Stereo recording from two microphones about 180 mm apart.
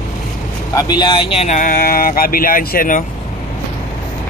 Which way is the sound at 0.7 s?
20° left (ahead or behind).